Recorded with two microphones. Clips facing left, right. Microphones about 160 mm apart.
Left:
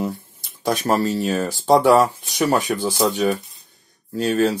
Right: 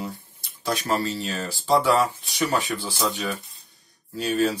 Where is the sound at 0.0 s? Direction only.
50° left (ahead or behind).